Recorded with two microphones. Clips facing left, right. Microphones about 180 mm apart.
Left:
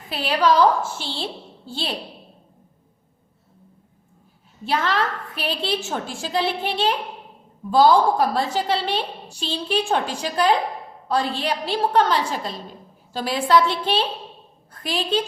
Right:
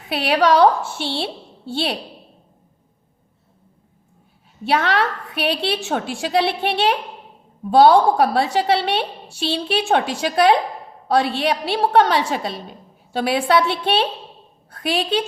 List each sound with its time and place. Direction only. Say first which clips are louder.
0.1 s a woman's voice: right 3 dB; 70° right (ahead or behind)
4.6 s a woman's voice: right 4 dB; 70° right (ahead or behind)